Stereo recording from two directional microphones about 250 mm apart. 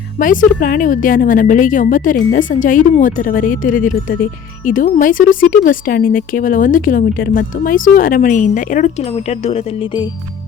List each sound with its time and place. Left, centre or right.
0.2 s speech: left